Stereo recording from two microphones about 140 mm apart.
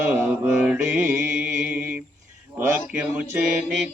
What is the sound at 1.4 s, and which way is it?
Music, 10° right (ahead or behind).